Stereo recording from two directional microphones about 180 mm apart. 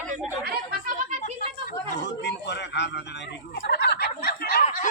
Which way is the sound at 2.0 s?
75° left (ahead or behind).